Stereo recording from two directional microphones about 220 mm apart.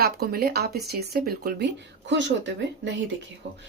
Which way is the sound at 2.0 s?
55° right (ahead or behind).